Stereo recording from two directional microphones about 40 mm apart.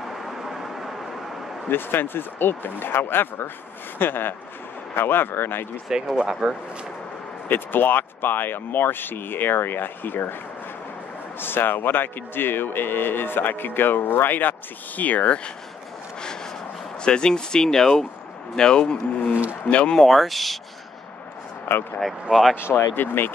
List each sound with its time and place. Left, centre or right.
0.0 s vehicle: centre
1.7 s speech: left
5.9 s speech: centre
7.4 s speech: left
11.3 s speech: left
15.0 s speech: left
17.0 s speech: left
20.0 s speech: centre
21.7 s speech: left
22.3 s speech: centre
22.6 s speech: left